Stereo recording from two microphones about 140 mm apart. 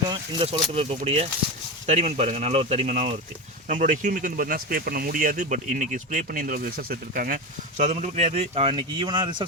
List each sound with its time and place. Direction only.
0.1 s speech: 40° right (ahead or behind)